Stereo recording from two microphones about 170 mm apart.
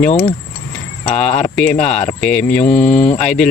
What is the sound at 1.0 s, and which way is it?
Speech, 40° left (ahead or behind).